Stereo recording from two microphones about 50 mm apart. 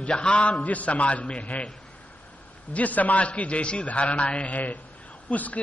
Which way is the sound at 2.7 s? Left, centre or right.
Left.